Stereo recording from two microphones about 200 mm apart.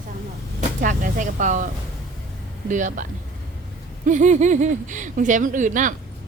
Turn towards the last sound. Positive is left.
turn(degrees=-40)  # may be behind; listen again after turning